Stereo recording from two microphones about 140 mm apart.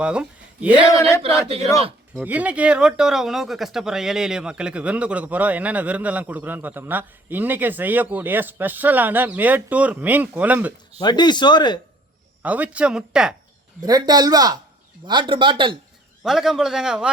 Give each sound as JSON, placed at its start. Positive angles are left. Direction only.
{"t": 0.0, "sound": "speech", "side_deg": -10}
{"t": 2.2, "sound": "speech", "side_deg": -10}
{"t": 11.0, "sound": "speech", "side_deg": 30}
{"t": 12.4, "sound": "speech", "side_deg": -10}
{"t": 13.8, "sound": "a man's voice", "side_deg": -30}
{"t": 16.2, "sound": "a man's voice", "side_deg": 0}